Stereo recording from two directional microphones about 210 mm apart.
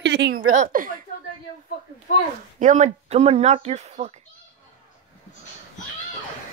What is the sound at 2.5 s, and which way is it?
Speech, 35° right (ahead or behind).